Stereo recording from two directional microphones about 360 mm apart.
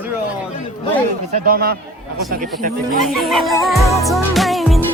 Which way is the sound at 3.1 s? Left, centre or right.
Centre.